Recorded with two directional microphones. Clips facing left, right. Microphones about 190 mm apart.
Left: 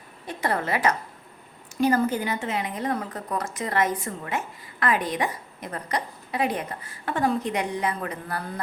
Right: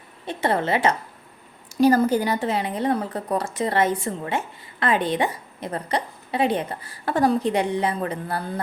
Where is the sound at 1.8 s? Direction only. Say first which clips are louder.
Right 5 dB; 35° right (ahead or behind).